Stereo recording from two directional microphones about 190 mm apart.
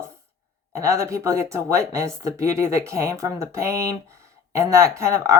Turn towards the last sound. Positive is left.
turn(degrees=-15)  # may be behind; listen again after turning